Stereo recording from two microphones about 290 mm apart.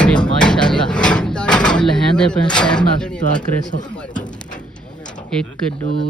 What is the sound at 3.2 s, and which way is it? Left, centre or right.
Speech, left.